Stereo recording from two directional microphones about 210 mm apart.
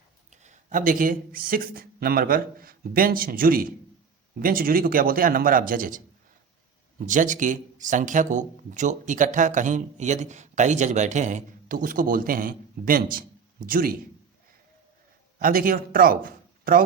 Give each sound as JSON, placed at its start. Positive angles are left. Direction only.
{"t": 0.3, "sound": "speech", "side_deg": -35}
{"t": 7.1, "sound": "speech", "side_deg": -35}
{"t": 15.4, "sound": "a man's voice", "side_deg": -40}